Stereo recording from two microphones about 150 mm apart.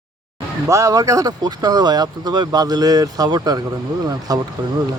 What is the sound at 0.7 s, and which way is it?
Speech, 20° right (ahead or behind).